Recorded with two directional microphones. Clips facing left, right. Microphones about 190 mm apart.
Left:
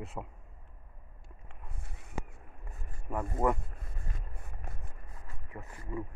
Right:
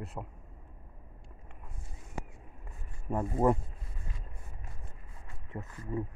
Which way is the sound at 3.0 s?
25° right (ahead or behind).